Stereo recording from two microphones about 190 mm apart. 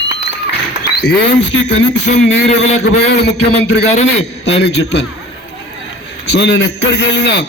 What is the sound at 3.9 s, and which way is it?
Speech, 35° left (ahead or behind).